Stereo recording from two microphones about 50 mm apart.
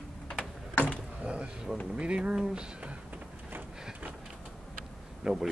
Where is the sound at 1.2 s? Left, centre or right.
Right.